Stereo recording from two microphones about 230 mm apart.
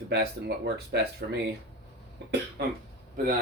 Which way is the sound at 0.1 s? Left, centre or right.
Right.